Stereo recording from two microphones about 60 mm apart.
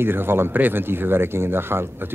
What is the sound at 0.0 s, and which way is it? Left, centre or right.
Speech, right.